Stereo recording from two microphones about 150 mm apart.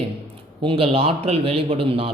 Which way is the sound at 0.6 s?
35° right (ahead or behind).